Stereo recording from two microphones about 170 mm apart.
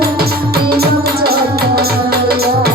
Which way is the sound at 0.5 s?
65° right (ahead or behind).